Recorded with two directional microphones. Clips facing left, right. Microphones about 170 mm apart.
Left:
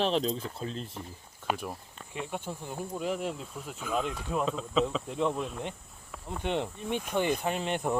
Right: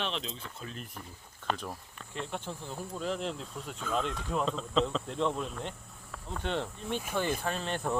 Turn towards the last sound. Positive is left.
turn(degrees=15)  # may be behind; listen again after turning